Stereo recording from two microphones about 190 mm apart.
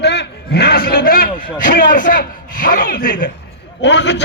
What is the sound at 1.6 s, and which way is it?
A man's voice, 50° left (ahead or behind).